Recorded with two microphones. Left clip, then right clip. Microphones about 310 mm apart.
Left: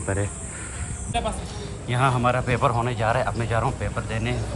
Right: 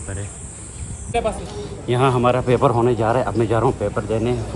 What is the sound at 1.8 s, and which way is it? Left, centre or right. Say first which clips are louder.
Speech: right 5 dB; centre.